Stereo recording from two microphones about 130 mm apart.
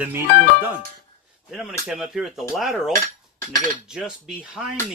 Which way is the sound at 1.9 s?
5° right (ahead or behind).